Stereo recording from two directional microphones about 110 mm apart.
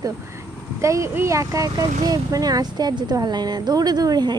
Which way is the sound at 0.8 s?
25° right (ahead or behind).